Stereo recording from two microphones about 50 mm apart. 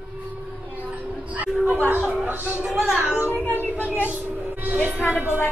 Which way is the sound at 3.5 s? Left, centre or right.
Left.